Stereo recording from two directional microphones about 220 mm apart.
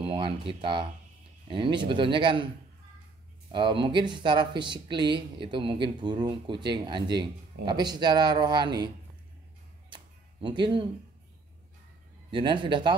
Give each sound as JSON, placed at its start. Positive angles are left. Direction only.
{"t": 0.0, "sound": "speech", "side_deg": -25}
{"t": 3.5, "sound": "speech", "side_deg": -20}
{"t": 9.8, "sound": "music", "side_deg": -20}
{"t": 12.3, "sound": "speech", "side_deg": -20}